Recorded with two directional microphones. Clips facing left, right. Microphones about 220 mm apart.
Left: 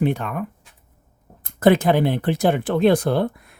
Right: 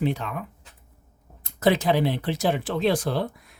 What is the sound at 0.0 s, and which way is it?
Speech, 55° left (ahead or behind).